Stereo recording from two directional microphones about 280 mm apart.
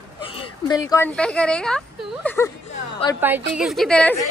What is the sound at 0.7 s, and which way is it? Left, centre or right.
A woman's voice, centre.